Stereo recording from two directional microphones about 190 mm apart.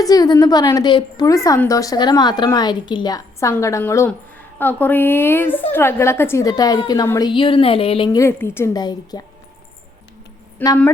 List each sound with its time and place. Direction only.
0.0 s a woman's voice: 20° left (ahead or behind)
10.6 s a woman's voice: 10° left (ahead or behind)